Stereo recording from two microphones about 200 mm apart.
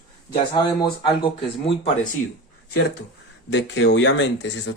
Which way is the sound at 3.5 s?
60° left (ahead or behind).